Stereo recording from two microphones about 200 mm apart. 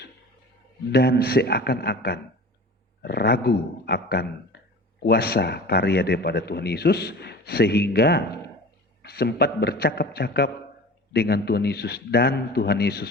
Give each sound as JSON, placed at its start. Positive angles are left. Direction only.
{"t": 0.9, "sound": "a man's voice", "side_deg": 55}